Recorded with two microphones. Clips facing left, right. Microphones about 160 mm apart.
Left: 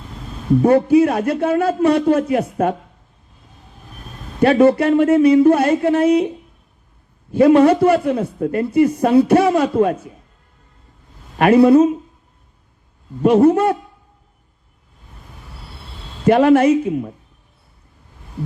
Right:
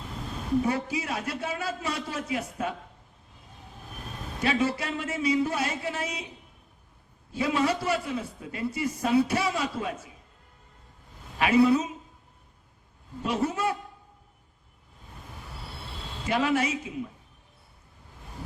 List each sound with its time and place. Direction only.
0.6 s speech: 55° left (ahead or behind)
4.4 s speech: 60° left (ahead or behind)
7.3 s speech: 55° left (ahead or behind)
11.3 s speech: 55° left (ahead or behind)
13.2 s speech: 55° left (ahead or behind)
16.2 s speech: 60° left (ahead or behind)